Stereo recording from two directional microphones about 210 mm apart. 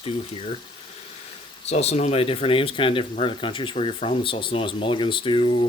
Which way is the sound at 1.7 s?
30° left (ahead or behind).